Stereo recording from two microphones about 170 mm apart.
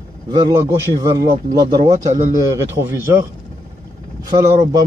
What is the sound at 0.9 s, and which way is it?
A man's voice, 20° right (ahead or behind).